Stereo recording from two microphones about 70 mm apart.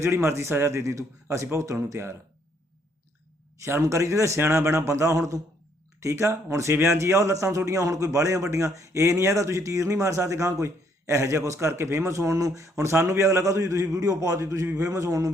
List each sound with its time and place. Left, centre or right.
0.0 s a man's voice: right
3.6 s a man's voice: right